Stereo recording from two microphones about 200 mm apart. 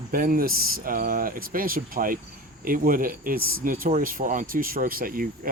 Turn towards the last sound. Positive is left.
turn(degrees=-45)  # may be behind; listen again after turning